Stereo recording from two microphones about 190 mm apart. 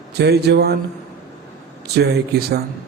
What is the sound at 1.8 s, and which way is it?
Speech, 60° right (ahead or behind).